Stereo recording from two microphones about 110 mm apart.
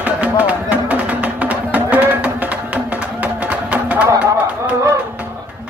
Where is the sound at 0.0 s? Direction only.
15° right (ahead or behind).